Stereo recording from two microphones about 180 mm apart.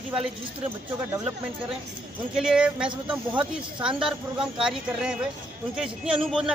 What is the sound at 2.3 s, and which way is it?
Speech, 5° right (ahead or behind).